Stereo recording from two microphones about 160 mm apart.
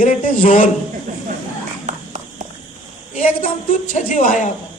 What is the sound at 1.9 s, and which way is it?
Horse, 50° right (ahead or behind).